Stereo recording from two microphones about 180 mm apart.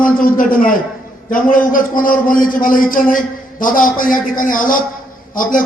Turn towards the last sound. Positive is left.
turn(degrees=50)  # may be behind; listen again after turning